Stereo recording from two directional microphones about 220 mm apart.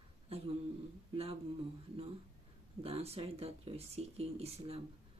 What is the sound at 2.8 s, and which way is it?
Speech, 25° right (ahead or behind).